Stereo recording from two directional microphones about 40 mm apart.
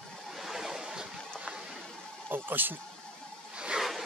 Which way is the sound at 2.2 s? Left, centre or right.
Right.